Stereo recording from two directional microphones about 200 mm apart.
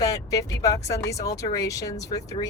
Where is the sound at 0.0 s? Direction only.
15° left (ahead or behind).